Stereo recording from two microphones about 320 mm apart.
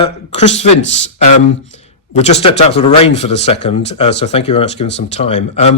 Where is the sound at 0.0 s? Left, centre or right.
Centre.